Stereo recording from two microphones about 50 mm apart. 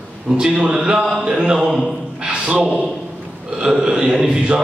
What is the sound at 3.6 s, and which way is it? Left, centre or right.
Mantra, centre.